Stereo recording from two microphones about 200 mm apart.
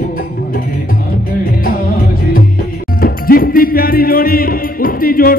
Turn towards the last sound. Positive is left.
turn(degrees=45)  # may be behind; listen again after turning